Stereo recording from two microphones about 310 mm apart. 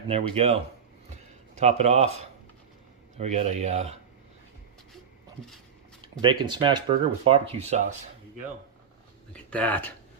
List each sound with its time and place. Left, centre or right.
0.1 s speech: centre
3.2 s speech: right
6.2 s speech: centre
9.3 s speech: centre